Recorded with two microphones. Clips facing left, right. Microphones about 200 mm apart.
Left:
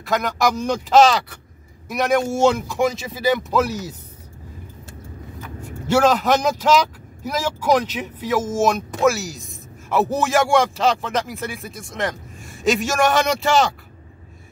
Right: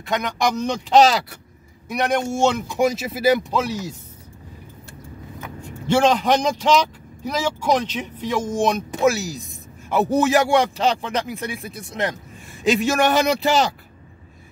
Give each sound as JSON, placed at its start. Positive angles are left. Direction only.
{"t": 0.0, "sound": "speech", "side_deg": 0}
{"t": 5.6, "sound": "speech", "side_deg": 5}
{"t": 10.8, "sound": "speech", "side_deg": -35}
{"t": 11.2, "sound": "speech", "side_deg": 0}